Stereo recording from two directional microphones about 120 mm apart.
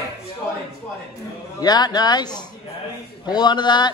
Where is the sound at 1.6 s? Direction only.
35° left (ahead or behind).